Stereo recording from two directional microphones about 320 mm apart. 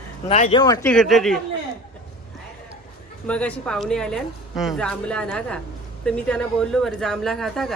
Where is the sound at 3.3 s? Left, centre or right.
Centre.